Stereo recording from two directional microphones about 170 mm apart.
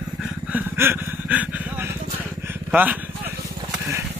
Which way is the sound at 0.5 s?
15° right (ahead or behind).